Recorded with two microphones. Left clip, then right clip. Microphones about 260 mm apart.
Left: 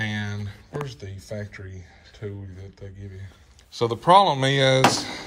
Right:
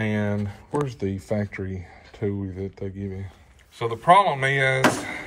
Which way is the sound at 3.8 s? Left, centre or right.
Centre.